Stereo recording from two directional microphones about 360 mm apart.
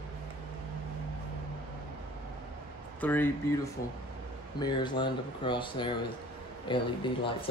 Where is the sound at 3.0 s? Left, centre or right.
Centre.